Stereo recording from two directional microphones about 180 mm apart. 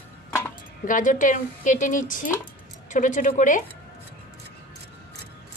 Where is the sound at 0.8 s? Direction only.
45° left (ahead or behind).